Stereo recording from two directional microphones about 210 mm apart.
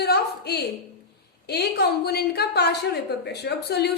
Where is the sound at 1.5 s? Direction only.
50° left (ahead or behind).